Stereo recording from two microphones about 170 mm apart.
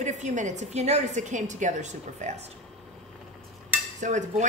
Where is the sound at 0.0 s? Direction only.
45° right (ahead or behind).